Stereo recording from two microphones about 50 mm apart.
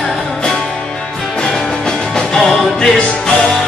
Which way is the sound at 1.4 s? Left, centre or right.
Centre.